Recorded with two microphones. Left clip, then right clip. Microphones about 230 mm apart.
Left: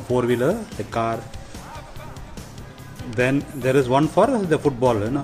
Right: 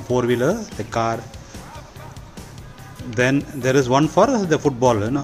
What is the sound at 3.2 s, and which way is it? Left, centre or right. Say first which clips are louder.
Speech: right 2 dB; centre.